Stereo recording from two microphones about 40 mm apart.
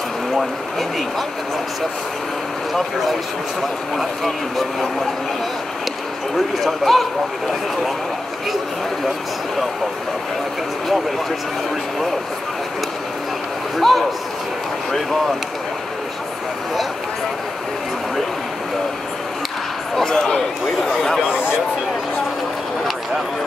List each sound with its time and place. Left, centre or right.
0.4 s speech: centre
3.9 s speech: centre
6.3 s speech: centre
13.7 s speech: centre
20.1 s speech: centre
21.3 s a sound: right